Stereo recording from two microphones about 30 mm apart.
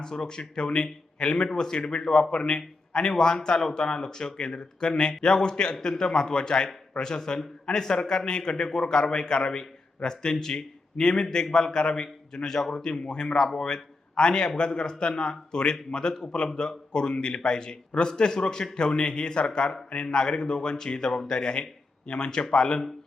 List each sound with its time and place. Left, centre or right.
0.0 s a man's voice: left